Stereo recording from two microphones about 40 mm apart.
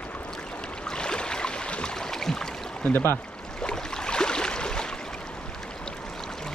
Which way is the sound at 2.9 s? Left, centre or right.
Left.